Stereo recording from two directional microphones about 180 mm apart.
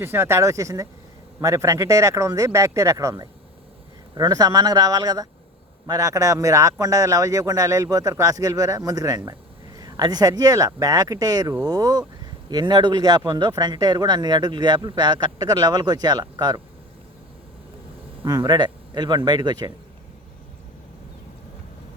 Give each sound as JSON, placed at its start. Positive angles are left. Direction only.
{"t": 0.0, "sound": "speech", "side_deg": -15}
{"t": 18.3, "sound": "speech", "side_deg": -20}